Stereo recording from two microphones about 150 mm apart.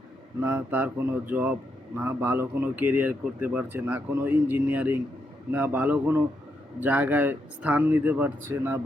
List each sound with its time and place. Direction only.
0.4 s speech: 10° right (ahead or behind)